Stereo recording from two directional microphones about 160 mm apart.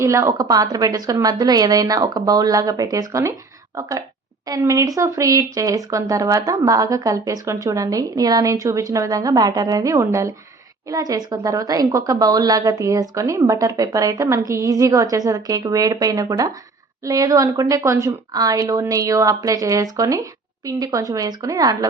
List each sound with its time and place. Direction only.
0.0 s speech: 20° right (ahead or behind)